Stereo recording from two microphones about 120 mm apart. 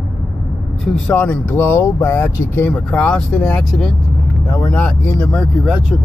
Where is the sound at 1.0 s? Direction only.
15° left (ahead or behind).